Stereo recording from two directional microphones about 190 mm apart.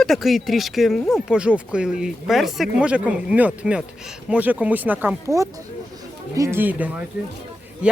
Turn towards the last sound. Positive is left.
turn(degrees=-5)  # may be behind; listen again after turning